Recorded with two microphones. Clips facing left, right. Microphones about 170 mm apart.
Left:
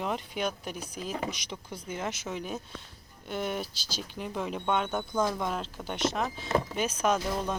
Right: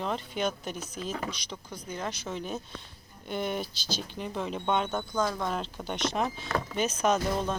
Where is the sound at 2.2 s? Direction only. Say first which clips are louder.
Even; 10° left (ahead or behind).